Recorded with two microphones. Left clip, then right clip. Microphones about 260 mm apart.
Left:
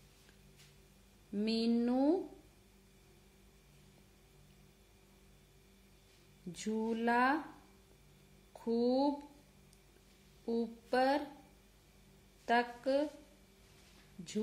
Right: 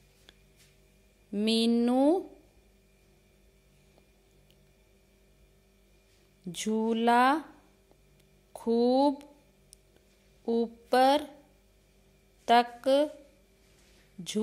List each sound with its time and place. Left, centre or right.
1.3 s speech: right
6.5 s speech: right
8.5 s speech: right
10.4 s speech: right
12.4 s speech: right